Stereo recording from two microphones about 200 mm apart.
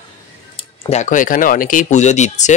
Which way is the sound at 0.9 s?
40° left (ahead or behind).